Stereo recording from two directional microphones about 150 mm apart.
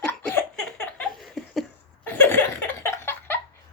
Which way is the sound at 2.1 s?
15° left (ahead or behind).